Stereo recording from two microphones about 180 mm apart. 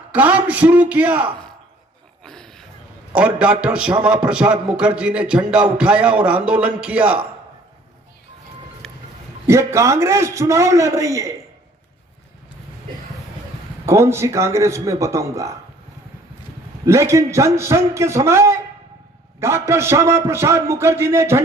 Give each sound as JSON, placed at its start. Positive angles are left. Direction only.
{"t": 0.1, "sound": "a man's voice", "side_deg": -10}
{"t": 2.2, "sound": "a sound", "side_deg": 5}
{"t": 3.2, "sound": "a man's voice", "side_deg": -5}
{"t": 8.8, "sound": "a sound", "side_deg": 0}
{"t": 9.5, "sound": "a man's voice", "side_deg": -15}
{"t": 13.8, "sound": "a man's voice", "side_deg": -15}
{"t": 16.8, "sound": "a man's voice", "side_deg": -15}